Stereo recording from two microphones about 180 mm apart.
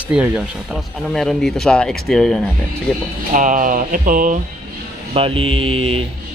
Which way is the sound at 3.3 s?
45° right (ahead or behind).